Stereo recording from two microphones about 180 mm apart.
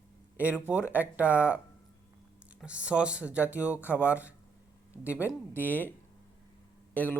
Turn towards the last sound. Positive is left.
turn(degrees=10)  # may be behind; listen again after turning